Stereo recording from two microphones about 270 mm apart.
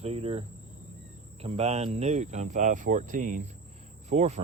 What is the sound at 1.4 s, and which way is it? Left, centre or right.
Speech, right.